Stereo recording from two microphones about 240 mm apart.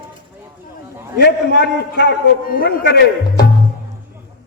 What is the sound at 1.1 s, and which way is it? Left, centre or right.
A man's voice, left.